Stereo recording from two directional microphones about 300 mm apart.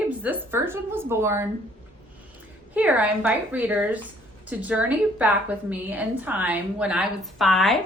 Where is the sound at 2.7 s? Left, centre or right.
Centre.